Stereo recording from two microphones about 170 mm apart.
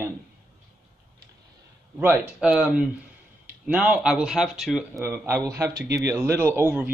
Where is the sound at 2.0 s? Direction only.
10° right (ahead or behind).